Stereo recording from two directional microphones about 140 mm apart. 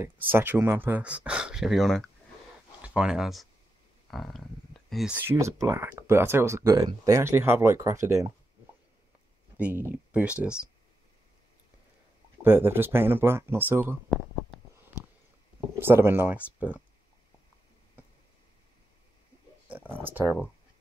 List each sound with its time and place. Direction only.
0.0 s speech: 15° right (ahead or behind)
4.1 s a sound: centre (ahead or behind)
5.1 s speech: 15° right (ahead or behind)
9.6 s speech: 10° right (ahead or behind)
12.4 s speech: 15° right (ahead or behind)
15.8 s speech: 15° right (ahead or behind)
19.7 s speech: 15° right (ahead or behind)